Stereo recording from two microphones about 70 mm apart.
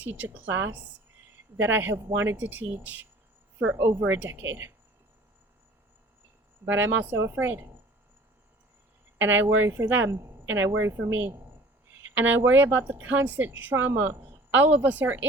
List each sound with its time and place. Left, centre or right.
0.0 s a woman's voice: right
3.8 s speech: right
4.0 s speech: right
6.7 s a woman's voice: right
9.1 s a woman's voice: right
9.9 s a woman's voice: right